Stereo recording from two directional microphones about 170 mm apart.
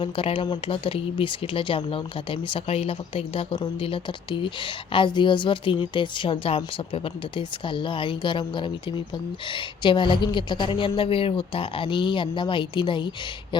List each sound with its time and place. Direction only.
0.0 s speech: 30° left (ahead or behind)